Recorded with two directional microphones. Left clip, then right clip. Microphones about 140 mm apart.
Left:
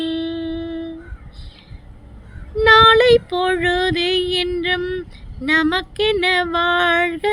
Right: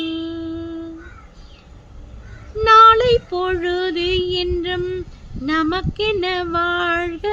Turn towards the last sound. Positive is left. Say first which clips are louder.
# left 4 dB
turn(degrees=30)  # may be behind; listen again after turning